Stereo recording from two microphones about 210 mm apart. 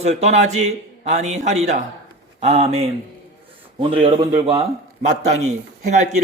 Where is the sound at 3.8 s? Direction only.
25° right (ahead or behind).